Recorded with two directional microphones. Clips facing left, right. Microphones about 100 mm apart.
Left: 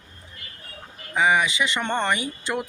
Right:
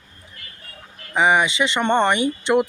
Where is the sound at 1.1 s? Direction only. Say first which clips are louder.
Right 3 dB; 25° right (ahead or behind).